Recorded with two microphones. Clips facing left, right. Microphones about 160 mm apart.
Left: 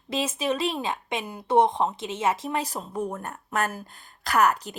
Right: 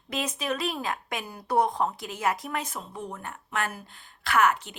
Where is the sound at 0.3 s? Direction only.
25° left (ahead or behind).